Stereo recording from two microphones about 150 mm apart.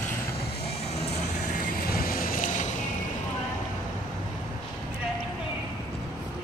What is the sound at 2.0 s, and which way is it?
Vehicle, 70° left (ahead or behind).